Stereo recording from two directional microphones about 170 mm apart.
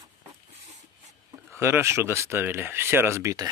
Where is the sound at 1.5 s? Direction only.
15° right (ahead or behind).